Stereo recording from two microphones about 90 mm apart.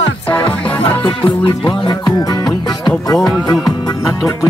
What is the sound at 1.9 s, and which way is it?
Music, 55° left (ahead or behind).